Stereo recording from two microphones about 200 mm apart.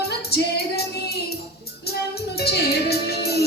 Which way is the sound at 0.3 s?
50° left (ahead or behind).